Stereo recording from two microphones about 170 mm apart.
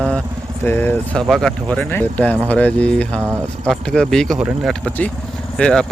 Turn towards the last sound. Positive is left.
turn(degrees=5)  # may be behind; listen again after turning